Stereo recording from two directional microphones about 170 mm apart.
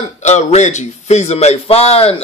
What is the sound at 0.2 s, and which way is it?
A man's voice, 40° left (ahead or behind).